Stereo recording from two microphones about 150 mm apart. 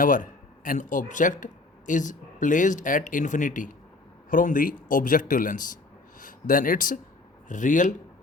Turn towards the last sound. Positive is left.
turn(degrees=60)  # may be behind; listen again after turning